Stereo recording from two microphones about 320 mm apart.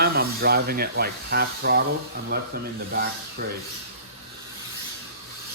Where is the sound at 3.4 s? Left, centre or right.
Right.